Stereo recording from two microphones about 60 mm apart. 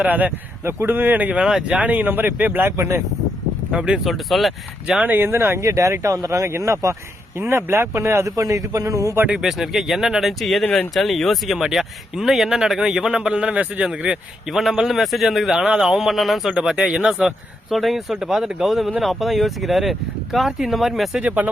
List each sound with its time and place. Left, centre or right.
0.0 s speech: right
0.6 s speech: right
1.4 s speech: centre
1.7 s speech: right
3.7 s speech: centre
4.0 s speech: centre
5.0 s speech: right
5.6 s a man's voice: right
7.3 s speech: right
8.4 s a man's voice: right
9.3 s speech: centre
14.4 s speech: centre
16.6 s speech: centre
21.2 s speech: right